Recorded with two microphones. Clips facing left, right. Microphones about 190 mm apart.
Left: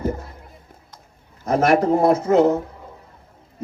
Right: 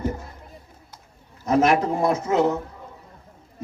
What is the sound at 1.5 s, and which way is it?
A man's voice, 50° left (ahead or behind).